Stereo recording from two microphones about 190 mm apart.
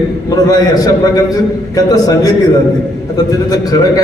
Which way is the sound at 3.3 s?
20° left (ahead or behind).